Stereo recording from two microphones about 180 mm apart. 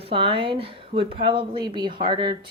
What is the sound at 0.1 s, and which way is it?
Speech, 30° right (ahead or behind).